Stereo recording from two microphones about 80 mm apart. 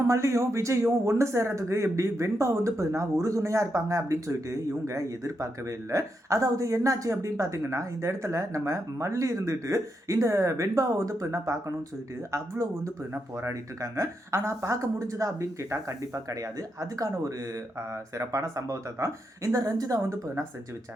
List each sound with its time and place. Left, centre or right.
0.1 s a man's voice: right